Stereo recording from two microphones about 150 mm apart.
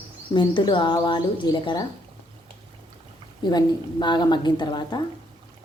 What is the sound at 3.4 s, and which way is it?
A woman's voice, 30° left (ahead or behind).